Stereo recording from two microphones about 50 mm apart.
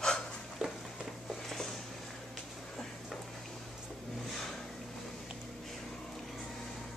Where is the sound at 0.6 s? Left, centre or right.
Centre.